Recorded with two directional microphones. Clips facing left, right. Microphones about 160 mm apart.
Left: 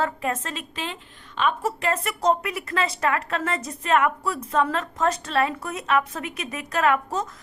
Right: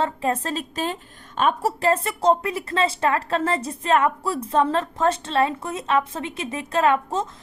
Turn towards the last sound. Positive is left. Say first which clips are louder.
# right 2 dB
turn(degrees=-25)  # may be behind; listen again after turning